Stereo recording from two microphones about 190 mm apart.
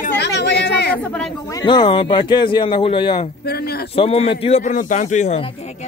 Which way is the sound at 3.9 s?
30° left (ahead or behind).